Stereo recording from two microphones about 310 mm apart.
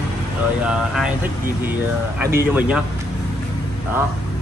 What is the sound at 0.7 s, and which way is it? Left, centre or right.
Speech, centre.